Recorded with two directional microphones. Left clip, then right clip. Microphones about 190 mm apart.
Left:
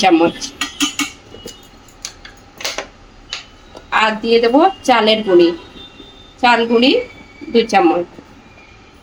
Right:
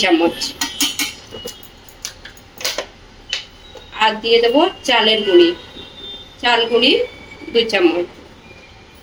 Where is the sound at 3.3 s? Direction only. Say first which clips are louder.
Right 4 dB; 60° left (ahead or behind).